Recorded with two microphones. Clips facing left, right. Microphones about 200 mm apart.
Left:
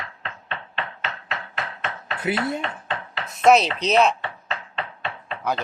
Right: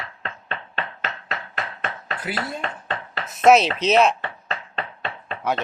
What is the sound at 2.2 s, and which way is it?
Speech, 25° left (ahead or behind).